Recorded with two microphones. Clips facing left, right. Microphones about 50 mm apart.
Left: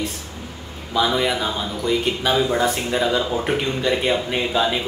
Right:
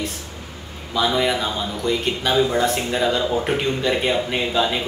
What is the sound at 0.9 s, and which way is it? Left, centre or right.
Speech, centre.